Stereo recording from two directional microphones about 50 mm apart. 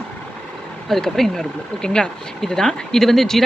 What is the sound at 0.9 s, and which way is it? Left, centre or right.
Speech, centre.